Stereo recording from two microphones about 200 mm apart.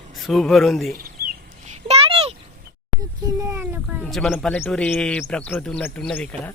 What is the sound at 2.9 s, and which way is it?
Speech, 15° right (ahead or behind).